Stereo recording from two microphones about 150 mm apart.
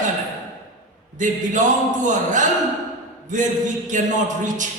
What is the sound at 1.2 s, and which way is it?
Speech, 55° right (ahead or behind).